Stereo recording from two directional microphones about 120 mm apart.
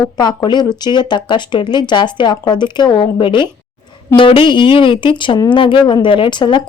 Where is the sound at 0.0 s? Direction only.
35° left (ahead or behind).